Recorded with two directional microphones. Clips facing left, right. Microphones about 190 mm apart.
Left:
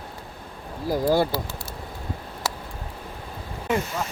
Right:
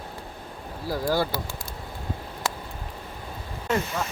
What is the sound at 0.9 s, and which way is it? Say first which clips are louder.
Bird: left 4 dB; 20° left (ahead or behind).